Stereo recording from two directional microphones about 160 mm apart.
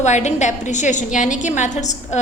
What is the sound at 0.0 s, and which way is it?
A woman's voice, 45° left (ahead or behind).